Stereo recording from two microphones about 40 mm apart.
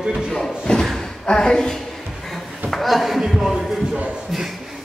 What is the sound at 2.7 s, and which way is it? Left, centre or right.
A man's voice, centre.